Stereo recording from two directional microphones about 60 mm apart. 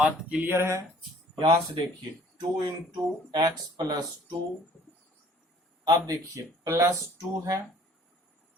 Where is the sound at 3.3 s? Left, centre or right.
Right.